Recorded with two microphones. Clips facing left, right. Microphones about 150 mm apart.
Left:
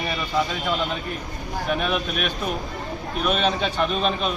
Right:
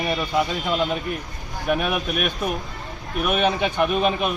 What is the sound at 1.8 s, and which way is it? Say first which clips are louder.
Speech: right 1 dB; 10° right (ahead or behind).